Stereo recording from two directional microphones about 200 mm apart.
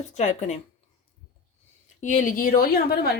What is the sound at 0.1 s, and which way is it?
Speech, 35° left (ahead or behind).